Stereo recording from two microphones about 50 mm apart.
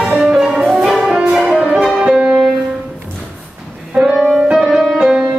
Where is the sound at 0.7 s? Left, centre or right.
Centre.